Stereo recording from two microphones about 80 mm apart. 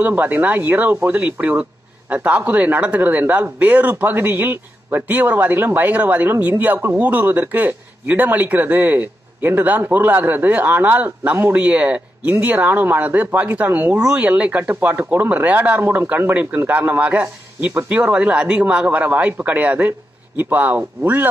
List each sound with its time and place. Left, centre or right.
0.0 s speech: right
11.5 s speech: centre
13.9 s speech: centre